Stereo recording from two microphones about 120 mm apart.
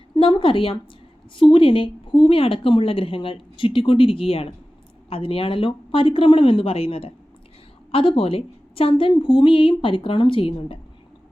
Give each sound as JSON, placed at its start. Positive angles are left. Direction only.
{"t": 0.2, "sound": "a woman's voice", "side_deg": 45}